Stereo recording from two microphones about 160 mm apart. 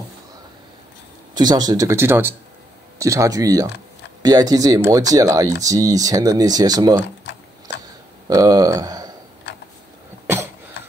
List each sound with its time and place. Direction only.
1.3 s speech: 25° right (ahead or behind)
8.3 s speech: 25° right (ahead or behind)